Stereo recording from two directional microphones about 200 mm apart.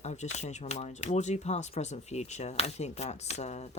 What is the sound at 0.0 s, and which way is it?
Speech, 35° left (ahead or behind).